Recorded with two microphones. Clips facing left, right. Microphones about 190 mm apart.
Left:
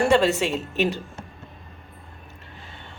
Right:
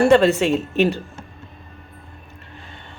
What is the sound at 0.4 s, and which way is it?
Speech, 50° right (ahead or behind).